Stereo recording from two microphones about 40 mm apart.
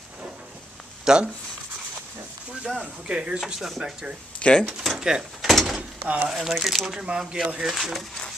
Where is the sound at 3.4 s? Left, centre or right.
Centre.